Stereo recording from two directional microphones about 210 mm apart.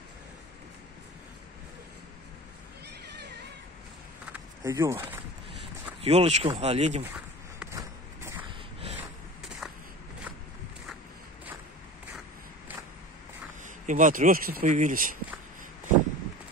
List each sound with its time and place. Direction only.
4.3 s a sound: 15° right (ahead or behind)
6.0 s speech: 30° right (ahead or behind)
7.7 s vehicle: 10° right (ahead or behind)
13.8 s speech: 40° right (ahead or behind)